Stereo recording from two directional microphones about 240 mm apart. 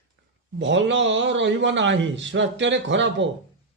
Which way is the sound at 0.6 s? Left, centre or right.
Right.